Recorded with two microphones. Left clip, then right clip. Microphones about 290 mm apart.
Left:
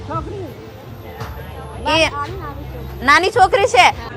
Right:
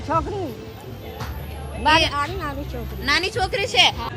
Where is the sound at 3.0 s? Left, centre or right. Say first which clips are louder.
Left 10 dB; left.